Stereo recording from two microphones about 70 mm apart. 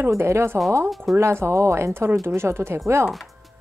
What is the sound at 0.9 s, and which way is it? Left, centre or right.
Speech, centre.